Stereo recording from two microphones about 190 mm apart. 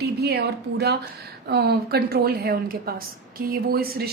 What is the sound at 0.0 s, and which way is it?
A woman's voice, 60° right (ahead or behind).